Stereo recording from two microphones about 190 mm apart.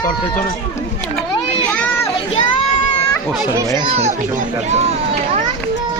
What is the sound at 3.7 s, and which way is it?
Speech, 35° right (ahead or behind).